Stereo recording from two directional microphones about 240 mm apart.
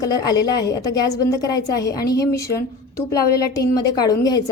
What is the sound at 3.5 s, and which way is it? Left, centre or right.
Speech, centre.